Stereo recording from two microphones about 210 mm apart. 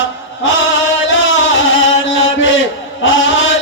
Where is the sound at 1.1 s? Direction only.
60° left (ahead or behind).